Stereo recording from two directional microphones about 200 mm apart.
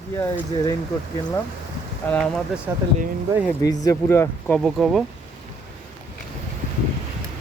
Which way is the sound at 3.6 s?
15° left (ahead or behind).